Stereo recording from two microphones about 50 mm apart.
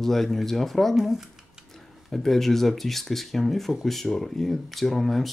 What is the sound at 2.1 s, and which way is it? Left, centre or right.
Speech, centre.